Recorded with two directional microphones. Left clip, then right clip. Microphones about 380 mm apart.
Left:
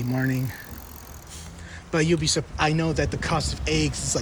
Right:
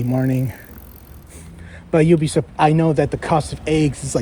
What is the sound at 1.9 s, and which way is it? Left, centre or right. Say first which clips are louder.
Speech: right 7 dB; centre.